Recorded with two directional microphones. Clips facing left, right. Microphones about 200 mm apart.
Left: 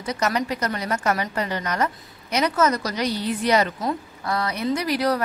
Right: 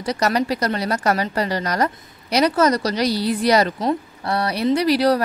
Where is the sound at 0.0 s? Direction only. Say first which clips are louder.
Right 4 dB; 35° right (ahead or behind).